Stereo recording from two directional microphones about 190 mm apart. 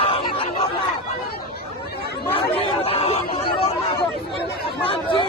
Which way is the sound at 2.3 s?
30° left (ahead or behind).